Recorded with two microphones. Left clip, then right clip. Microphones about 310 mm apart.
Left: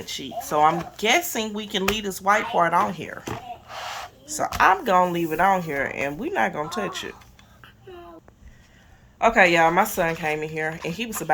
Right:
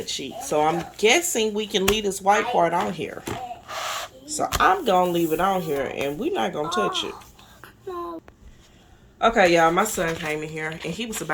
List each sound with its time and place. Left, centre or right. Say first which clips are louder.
0.0 s speech: right 1 dB; centre
4.7 s speech: even; left
5.5 s speech: left 2 dB; centre
5.7 s speech: even; left
9.2 s speech: even; centre